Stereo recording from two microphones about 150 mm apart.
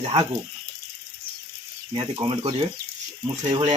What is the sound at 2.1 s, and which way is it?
Speech, 30° right (ahead or behind).